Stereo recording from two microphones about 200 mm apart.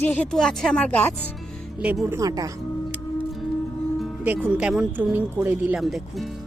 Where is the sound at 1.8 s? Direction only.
5° right (ahead or behind).